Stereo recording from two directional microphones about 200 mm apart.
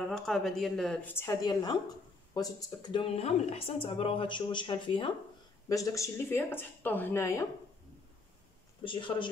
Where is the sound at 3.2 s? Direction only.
30° left (ahead or behind); by 7.4 s 15° left (ahead or behind).